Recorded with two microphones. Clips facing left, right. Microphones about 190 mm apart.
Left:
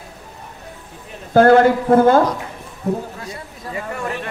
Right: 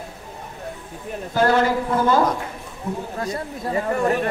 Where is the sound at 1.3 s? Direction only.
55° left (ahead or behind).